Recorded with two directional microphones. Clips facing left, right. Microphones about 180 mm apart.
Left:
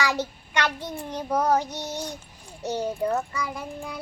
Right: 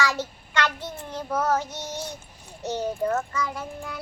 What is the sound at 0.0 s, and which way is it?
Child singing, 15° left (ahead or behind).